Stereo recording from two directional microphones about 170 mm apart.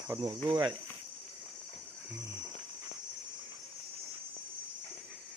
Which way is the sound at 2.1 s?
15° right (ahead or behind).